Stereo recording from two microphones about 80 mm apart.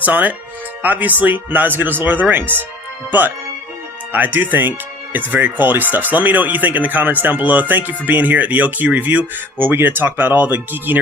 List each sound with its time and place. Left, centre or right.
0.0 s speech: centre